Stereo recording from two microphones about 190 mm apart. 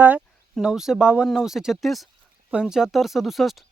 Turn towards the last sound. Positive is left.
turn(degrees=0)  # may be behind; listen again after turning